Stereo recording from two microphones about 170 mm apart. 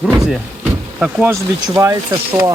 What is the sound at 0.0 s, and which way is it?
Speech, centre (ahead or behind).